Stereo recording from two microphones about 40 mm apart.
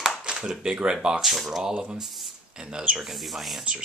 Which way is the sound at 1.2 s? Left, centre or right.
Centre.